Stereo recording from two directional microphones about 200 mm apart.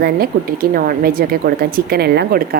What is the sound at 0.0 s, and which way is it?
Speech, 50° right (ahead or behind).